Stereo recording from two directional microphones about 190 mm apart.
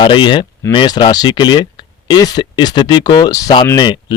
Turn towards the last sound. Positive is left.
turn(degrees=20)  # may be behind; listen again after turning